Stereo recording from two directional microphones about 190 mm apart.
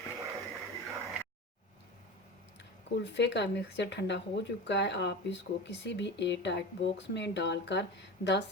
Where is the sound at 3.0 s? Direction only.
65° left (ahead or behind).